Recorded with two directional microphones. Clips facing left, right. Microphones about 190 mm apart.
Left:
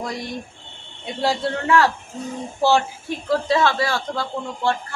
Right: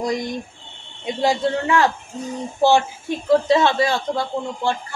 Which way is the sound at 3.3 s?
20° right (ahead or behind).